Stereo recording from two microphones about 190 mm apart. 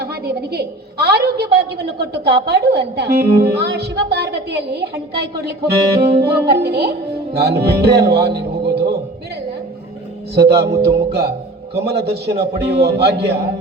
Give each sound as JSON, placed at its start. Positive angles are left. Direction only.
{"t": 0.5, "sound": "a woman's voice", "side_deg": -55}
{"t": 10.3, "sound": "a woman's voice", "side_deg": -60}